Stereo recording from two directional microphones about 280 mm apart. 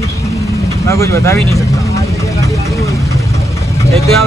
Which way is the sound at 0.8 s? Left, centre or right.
Centre.